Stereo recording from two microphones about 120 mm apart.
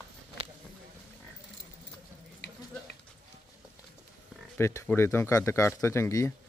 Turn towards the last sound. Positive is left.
turn(degrees=25)  # may be behind; listen again after turning